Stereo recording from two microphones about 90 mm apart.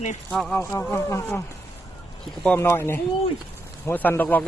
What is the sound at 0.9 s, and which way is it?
Speech, 30° left (ahead or behind).